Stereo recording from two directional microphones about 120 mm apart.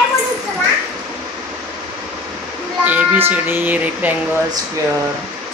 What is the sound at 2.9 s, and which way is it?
Speech, 15° right (ahead or behind).